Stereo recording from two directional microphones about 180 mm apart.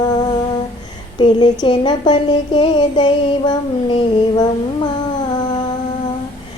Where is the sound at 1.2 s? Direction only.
25° left (ahead or behind).